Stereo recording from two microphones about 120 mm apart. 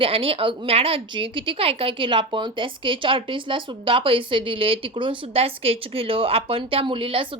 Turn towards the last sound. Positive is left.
turn(degrees=-50)  # may be behind; listen again after turning